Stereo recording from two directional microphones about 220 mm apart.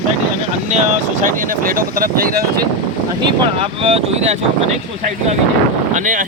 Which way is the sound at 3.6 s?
25° right (ahead or behind).